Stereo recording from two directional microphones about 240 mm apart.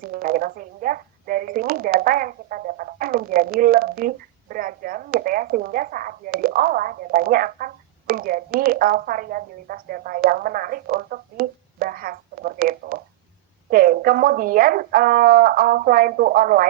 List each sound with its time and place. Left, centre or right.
0.0 s a woman's voice: right